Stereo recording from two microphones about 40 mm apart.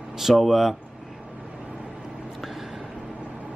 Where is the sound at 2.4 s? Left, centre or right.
Centre.